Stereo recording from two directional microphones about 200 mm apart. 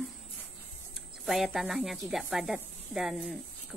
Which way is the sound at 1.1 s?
Centre (ahead or behind).